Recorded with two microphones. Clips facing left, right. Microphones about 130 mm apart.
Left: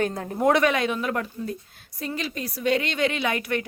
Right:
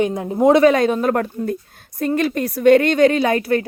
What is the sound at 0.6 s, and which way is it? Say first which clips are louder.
A woman's voice: right 9 dB; 40° right (ahead or behind).